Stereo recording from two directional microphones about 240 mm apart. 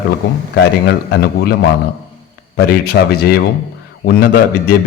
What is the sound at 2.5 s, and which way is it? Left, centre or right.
A man's voice, left.